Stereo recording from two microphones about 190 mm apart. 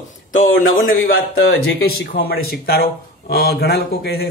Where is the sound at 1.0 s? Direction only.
50° left (ahead or behind).